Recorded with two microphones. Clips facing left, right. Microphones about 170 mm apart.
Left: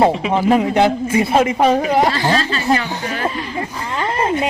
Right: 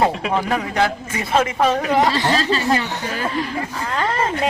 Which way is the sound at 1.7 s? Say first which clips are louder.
Left 3 dB; 25° left (ahead or behind).